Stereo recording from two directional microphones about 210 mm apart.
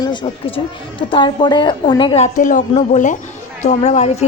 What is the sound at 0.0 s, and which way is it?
A woman's voice, 20° left (ahead or behind).